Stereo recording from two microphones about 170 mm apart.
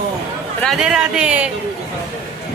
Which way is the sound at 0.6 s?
Centre (ahead or behind).